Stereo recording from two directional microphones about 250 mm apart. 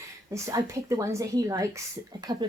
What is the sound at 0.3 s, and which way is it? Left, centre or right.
A woman's voice, centre.